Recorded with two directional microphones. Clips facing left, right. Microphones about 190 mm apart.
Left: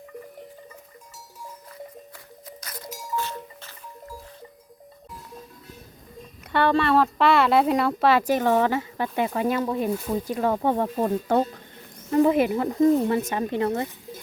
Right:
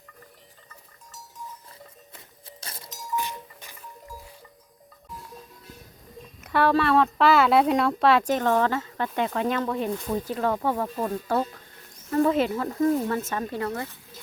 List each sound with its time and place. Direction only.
2.6 s music: 30° right (ahead or behind)
3.2 s music: 15° right (ahead or behind)
6.5 s speech: centre (ahead or behind); by 13.9 s 20° left (ahead or behind)